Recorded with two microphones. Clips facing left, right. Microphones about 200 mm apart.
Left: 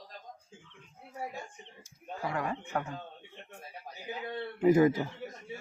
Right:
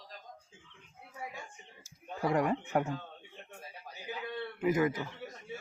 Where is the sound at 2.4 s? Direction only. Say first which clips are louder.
Right 4 dB; 15° right (ahead or behind).